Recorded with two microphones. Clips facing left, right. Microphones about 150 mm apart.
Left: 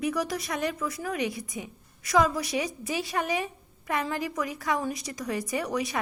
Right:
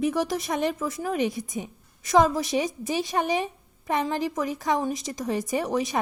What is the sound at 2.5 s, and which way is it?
A woman's voice, 20° right (ahead or behind).